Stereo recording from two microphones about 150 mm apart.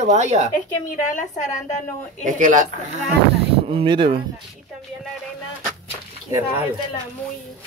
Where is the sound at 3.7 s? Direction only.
30° right (ahead or behind).